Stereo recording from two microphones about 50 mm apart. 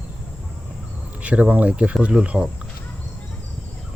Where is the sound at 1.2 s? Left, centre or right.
Right.